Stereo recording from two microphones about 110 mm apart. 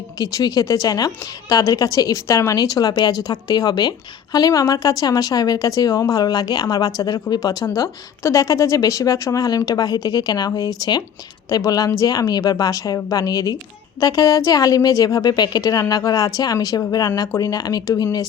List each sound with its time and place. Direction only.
0.2 s a woman's voice: 35° left (ahead or behind)